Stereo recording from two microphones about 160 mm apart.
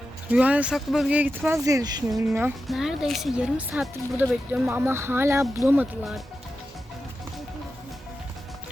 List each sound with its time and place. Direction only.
0.3 s speech: 10° right (ahead or behind)
1.6 s speech: 25° right (ahead or behind)
2.6 s speech: 5° right (ahead or behind)